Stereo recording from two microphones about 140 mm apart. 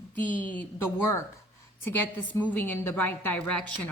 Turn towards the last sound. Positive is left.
turn(degrees=10)  # may be behind; listen again after turning